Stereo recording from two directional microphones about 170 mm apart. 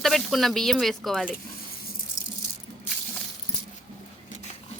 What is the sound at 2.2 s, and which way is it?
Rattle, 45° left (ahead or behind).